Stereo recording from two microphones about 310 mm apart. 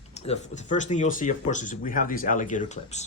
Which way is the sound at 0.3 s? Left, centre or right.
Left.